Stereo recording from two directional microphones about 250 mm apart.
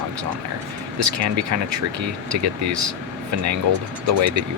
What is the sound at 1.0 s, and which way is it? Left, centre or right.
Speech, right.